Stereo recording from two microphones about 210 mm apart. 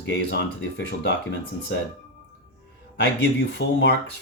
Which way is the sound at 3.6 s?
55° left (ahead or behind).